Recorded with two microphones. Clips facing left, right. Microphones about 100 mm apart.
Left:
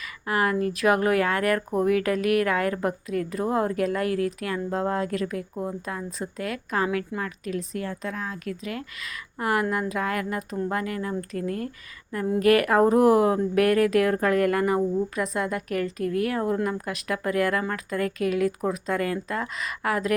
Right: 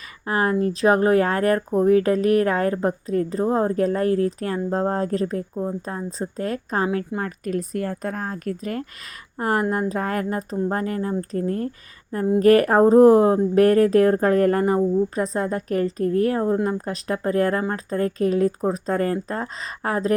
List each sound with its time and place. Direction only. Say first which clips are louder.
0.0 s a woman's voice: right 2 dB; 35° right (ahead or behind)
7.2 s a woman's voice: right 4 dB; 45° right (ahead or behind)